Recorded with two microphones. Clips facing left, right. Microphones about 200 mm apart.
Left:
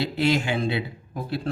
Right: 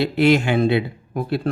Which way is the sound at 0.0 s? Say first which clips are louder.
Right 7 dB; 60° right (ahead or behind).